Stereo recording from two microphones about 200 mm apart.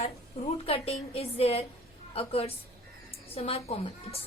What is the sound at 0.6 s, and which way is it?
A woman's voice, 30° left (ahead or behind).